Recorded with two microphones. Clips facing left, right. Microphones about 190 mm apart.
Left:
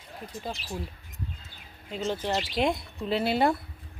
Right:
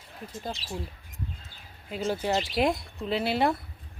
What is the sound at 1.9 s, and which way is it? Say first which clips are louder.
A woman's voice: right 2 dB; 10° right (ahead or behind).